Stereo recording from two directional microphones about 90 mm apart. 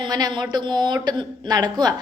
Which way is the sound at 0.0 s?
50° right (ahead or behind).